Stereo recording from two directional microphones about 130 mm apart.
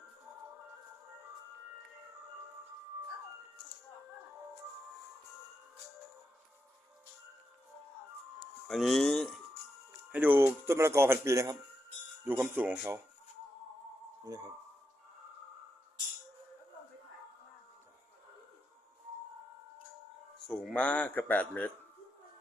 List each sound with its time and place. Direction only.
8.6 s speech: centre (ahead or behind)
10.1 s speech: 10° right (ahead or behind)
20.5 s a man's voice: 10° left (ahead or behind)